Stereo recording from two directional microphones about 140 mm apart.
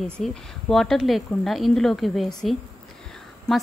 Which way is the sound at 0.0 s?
5° left (ahead or behind).